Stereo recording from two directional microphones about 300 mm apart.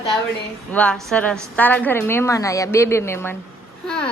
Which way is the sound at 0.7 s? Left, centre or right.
Centre.